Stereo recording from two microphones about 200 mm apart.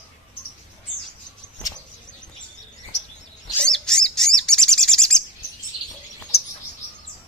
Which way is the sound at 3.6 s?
5° left (ahead or behind).